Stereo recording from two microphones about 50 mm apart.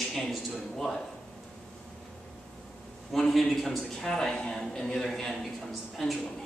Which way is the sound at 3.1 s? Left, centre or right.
Centre.